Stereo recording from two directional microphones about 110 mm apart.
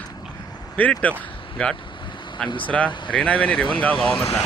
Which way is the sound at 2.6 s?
15° left (ahead or behind).